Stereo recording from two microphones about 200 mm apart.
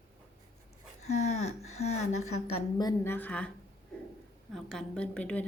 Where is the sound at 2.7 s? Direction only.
15° left (ahead or behind).